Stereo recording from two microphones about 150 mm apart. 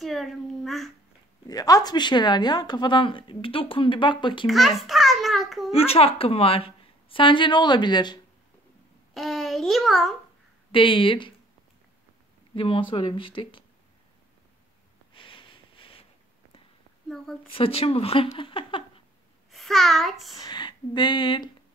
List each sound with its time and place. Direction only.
0.0 s child singing: centre (ahead or behind)
1.5 s speech: 25° left (ahead or behind)
4.5 s a child's voice: centre (ahead or behind)
5.7 s speech: 40° left (ahead or behind)
9.1 s a child's voice: centre (ahead or behind)
10.7 s speech: 35° left (ahead or behind)
12.5 s speech: 35° left (ahead or behind)
15.1 s a sound: 35° left (ahead or behind)
17.6 s speech: 40° left (ahead or behind)
18.3 s a sound: 35° left (ahead or behind)
19.5 s a child's voice: centre (ahead or behind)
20.3 s speech: 30° left (ahead or behind)